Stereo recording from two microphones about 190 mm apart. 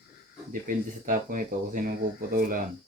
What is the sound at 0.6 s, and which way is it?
Speech, 45° right (ahead or behind).